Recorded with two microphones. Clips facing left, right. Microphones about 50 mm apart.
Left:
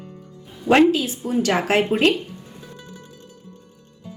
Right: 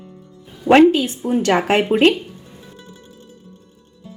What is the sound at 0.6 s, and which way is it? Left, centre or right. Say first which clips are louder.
A woman's voice: right 4 dB; right.